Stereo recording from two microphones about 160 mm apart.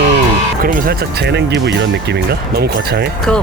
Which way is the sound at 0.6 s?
60° right (ahead or behind).